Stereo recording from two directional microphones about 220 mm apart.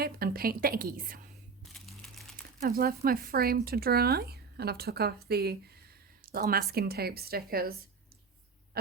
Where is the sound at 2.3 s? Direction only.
40° right (ahead or behind).